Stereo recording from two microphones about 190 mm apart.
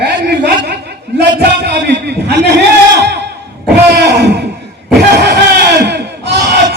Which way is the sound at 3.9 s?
60° right (ahead or behind).